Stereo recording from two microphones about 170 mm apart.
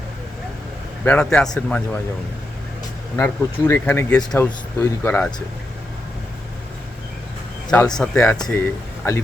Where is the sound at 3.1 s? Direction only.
10° left (ahead or behind).